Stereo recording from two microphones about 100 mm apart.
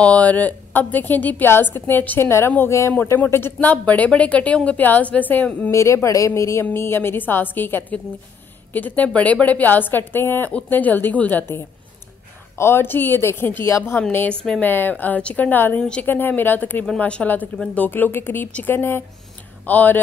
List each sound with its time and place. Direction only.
0.0 s a woman's voice: 15° left (ahead or behind)
5.7 s a woman's voice: 30° left (ahead or behind)